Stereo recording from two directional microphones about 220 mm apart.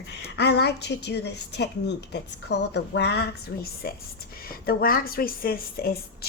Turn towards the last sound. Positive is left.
turn(degrees=45)  # may be behind; listen again after turning